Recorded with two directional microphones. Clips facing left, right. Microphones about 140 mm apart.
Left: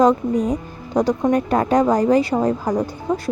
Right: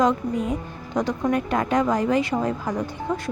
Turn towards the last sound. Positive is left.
turn(degrees=35)  # may be behind; listen again after turning